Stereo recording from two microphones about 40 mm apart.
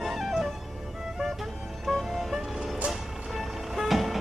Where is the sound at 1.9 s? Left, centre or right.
Centre.